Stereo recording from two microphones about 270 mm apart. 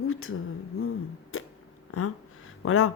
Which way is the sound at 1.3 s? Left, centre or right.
Left.